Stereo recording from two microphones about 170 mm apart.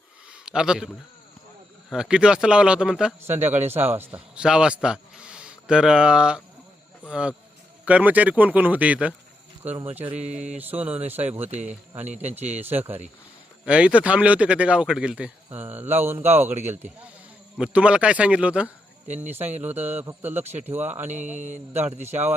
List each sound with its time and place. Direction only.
0.4 s a man's voice: 5° right (ahead or behind)
9.6 s speech: 35° right (ahead or behind)
10.6 s speech: 10° right (ahead or behind)
12.6 s speech: 10° right (ahead or behind)
17.6 s speech: 5° right (ahead or behind)
19.0 s speech: 45° right (ahead or behind)
19.6 s speech: 10° right (ahead or behind)
20.4 s speech: 40° right (ahead or behind)
20.7 s speech: 10° right (ahead or behind)
21.4 s speech: 45° right (ahead or behind)